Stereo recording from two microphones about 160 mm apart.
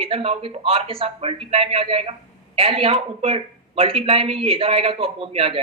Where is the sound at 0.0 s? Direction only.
35° right (ahead or behind).